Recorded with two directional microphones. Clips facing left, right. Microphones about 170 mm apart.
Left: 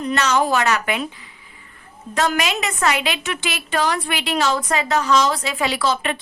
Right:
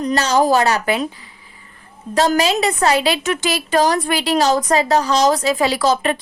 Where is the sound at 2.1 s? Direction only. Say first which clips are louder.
Right 5 dB; 35° right (ahead or behind).